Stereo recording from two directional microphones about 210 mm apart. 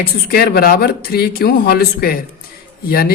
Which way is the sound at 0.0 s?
45° left (ahead or behind).